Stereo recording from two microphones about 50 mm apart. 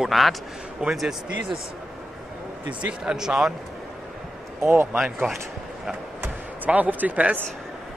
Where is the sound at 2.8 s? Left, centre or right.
Right.